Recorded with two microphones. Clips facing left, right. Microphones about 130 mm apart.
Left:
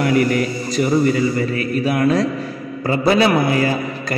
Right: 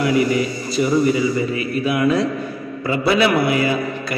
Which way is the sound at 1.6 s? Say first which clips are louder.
Left 1 dB; 40° left (ahead or behind).